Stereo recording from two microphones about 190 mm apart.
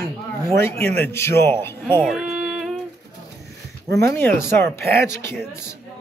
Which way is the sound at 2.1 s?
Centre (ahead or behind).